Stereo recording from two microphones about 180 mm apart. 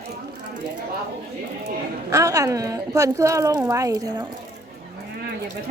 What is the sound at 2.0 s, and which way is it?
A woman's voice, 20° right (ahead or behind).